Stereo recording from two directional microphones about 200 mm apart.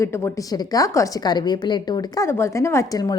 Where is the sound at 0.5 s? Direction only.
15° left (ahead or behind).